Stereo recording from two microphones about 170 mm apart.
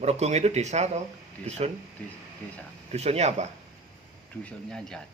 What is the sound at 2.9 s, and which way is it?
Speech, 40° right (ahead or behind).